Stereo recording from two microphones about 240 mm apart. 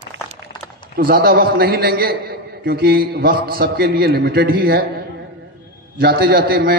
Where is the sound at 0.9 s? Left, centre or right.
Right.